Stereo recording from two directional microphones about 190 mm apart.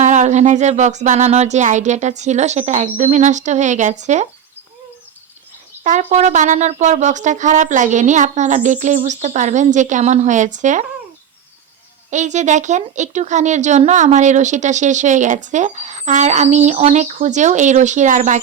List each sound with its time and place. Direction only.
0.0 s speech: 40° right (ahead or behind)
5.8 s speech: 40° right (ahead or behind)
12.1 s speech: 40° right (ahead or behind)